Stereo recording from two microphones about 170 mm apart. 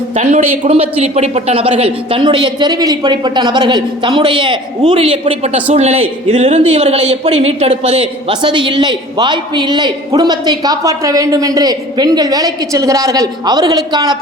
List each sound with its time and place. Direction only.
0.2 s a woman's voice: 45° right (ahead or behind); by 14.2 s 25° right (ahead or behind)